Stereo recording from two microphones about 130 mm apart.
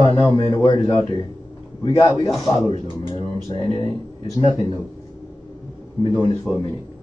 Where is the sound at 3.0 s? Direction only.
45° left (ahead or behind).